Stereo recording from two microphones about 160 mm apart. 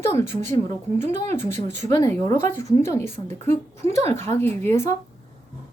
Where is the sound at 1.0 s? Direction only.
45° right (ahead or behind).